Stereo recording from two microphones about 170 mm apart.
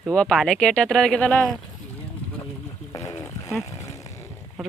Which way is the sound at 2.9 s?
15° left (ahead or behind).